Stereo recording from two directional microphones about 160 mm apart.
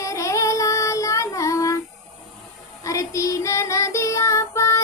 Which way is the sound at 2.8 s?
20° left (ahead or behind).